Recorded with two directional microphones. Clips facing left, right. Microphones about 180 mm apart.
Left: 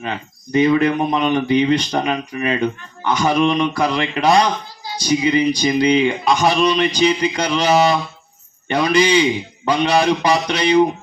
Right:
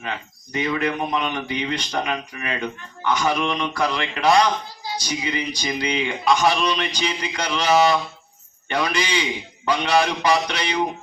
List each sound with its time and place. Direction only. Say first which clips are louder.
0.0 s speech: left 4 dB; 30° left (ahead or behind)
3.6 s speech: left 5 dB; 15° left (ahead or behind)